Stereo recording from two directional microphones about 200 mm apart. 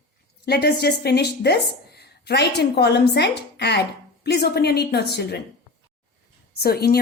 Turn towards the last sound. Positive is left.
turn(degrees=50)  # may be behind; listen again after turning